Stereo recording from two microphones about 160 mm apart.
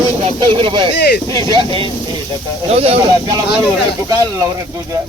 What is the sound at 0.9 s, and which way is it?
Speech, 90° left.